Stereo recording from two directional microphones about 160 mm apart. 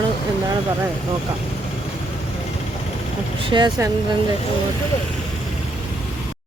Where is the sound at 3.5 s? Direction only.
30° right (ahead or behind).